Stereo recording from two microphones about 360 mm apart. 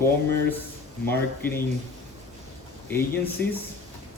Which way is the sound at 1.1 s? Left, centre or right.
Centre.